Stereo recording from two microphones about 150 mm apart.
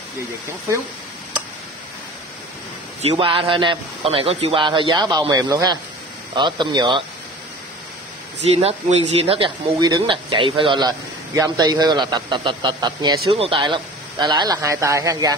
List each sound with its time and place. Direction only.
3.0 s a man's voice: 35° right (ahead or behind)
8.5 s a man's voice: 45° right (ahead or behind)
9.8 s speech: 25° right (ahead or behind)